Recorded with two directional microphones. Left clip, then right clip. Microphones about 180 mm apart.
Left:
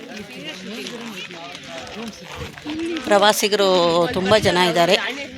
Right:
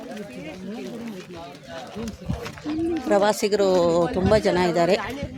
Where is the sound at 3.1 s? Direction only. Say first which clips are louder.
Left 5 dB; centre (ahead or behind).